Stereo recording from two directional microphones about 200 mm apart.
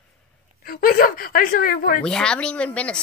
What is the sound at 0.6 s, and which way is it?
A woman's voice, 45° left (ahead or behind).